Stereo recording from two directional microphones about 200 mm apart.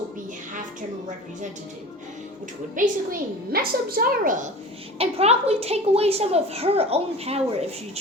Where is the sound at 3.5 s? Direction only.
45° right (ahead or behind).